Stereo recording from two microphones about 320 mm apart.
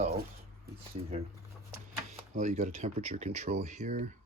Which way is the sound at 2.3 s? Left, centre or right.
Right.